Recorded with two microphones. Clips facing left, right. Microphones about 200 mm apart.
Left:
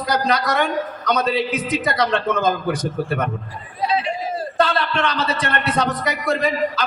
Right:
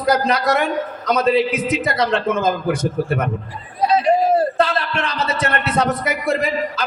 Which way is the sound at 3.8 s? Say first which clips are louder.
Right 5 dB; 40° right (ahead or behind).